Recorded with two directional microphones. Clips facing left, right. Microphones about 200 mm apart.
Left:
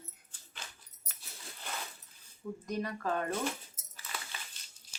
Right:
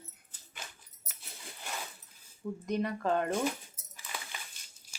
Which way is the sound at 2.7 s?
25° right (ahead or behind).